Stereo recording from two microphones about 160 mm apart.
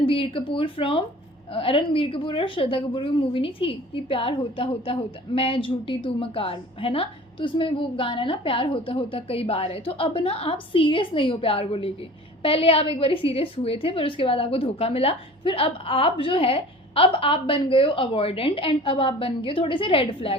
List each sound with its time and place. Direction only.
0.0 s a woman's voice: 35° left (ahead or behind)